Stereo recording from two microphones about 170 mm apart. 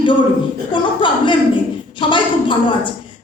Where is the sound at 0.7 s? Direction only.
30° left (ahead or behind).